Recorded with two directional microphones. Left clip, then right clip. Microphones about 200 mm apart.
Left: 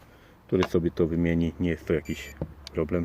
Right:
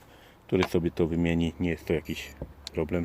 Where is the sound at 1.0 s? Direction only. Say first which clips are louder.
Left 1 dB; 25° right (ahead or behind).